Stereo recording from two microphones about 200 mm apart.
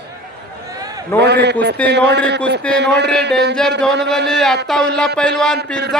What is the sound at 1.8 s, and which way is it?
Speech, 5° left (ahead or behind).